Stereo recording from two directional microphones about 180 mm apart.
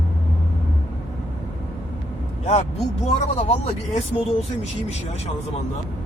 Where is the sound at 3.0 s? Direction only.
35° left (ahead or behind).